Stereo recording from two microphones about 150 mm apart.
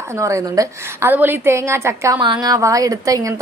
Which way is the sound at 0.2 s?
20° right (ahead or behind).